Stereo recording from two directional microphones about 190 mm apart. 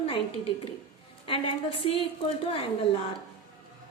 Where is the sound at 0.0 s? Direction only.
30° left (ahead or behind).